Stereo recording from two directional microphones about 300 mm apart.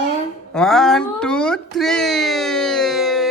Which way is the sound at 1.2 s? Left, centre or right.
Centre.